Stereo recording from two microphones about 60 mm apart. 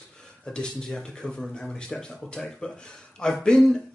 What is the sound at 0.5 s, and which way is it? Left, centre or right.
A man's voice, centre.